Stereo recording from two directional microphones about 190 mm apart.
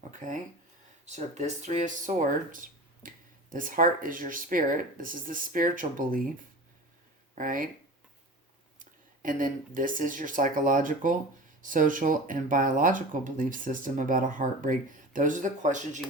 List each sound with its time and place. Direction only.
1.0 s speech: 35° right (ahead or behind)
7.3 s speech: 45° right (ahead or behind)
8.8 s speech: 45° right (ahead or behind)